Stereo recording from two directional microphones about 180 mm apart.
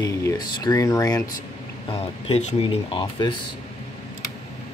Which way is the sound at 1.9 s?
35° left (ahead or behind).